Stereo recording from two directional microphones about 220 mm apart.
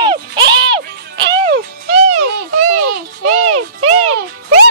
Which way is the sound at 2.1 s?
80° right.